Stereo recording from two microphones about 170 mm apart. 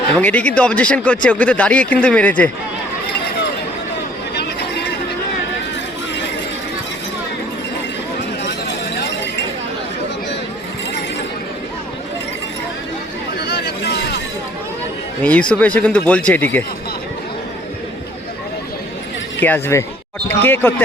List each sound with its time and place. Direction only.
0.2 s speech: 10° left (ahead or behind)
13.5 s a sound: 80° left
15.2 s speech: 10° left (ahead or behind)
19.4 s speech: 10° left (ahead or behind)